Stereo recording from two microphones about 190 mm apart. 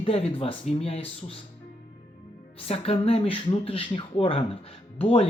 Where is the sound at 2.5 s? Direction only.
30° left (ahead or behind).